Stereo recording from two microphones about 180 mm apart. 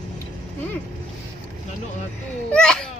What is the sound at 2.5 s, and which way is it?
Speech, 5° left (ahead or behind).